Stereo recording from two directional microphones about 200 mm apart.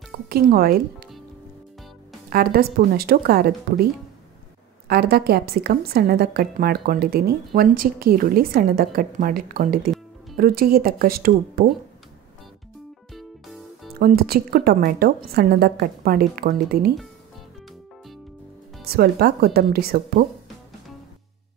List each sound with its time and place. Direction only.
0.3 s a woman's voice: 50° right (ahead or behind)
2.2 s a woman's voice: 50° right (ahead or behind)
13.1 s music: centre (ahead or behind)
13.9 s a woman's voice: 50° right (ahead or behind)
18.9 s a woman's voice: 50° right (ahead or behind)